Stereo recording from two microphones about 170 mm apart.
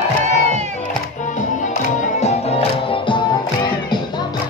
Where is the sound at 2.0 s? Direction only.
40° left (ahead or behind).